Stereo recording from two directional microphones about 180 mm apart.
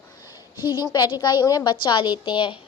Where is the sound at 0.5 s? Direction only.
15° right (ahead or behind).